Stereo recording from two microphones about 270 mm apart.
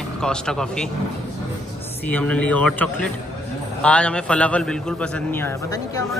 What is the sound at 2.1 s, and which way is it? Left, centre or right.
A man's voice, centre.